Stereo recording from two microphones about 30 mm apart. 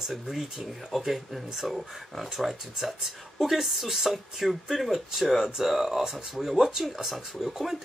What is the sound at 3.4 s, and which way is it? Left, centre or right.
Speech, centre.